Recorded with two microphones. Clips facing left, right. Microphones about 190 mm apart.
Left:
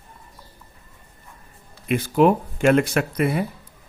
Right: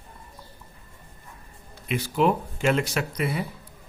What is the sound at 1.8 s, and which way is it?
Speech, 50° left (ahead or behind).